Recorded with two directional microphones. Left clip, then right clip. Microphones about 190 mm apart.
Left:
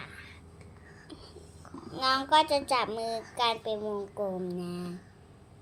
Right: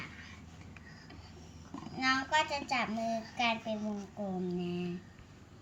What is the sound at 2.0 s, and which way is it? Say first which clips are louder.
A child's voice: left 6 dB; 40° left (ahead or behind).